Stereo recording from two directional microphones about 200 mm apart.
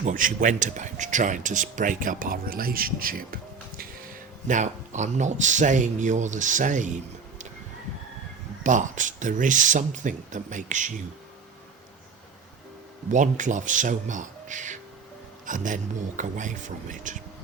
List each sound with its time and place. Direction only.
0.0 s speech: 45° right (ahead or behind)
8.6 s speech: 40° right (ahead or behind)
13.1 s speech: 40° right (ahead or behind)